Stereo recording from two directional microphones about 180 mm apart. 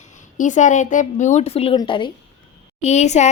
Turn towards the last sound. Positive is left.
turn(degrees=40)  # may be behind; listen again after turning